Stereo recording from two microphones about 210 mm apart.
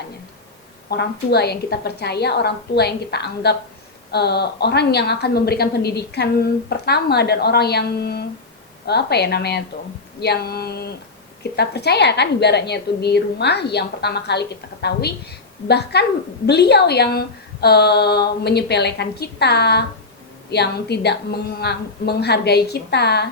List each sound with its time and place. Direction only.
0.9 s a woman's voice: 50° left (ahead or behind)